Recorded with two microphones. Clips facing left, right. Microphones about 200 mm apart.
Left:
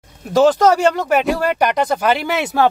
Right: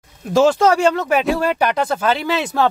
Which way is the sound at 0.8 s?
Centre (ahead or behind).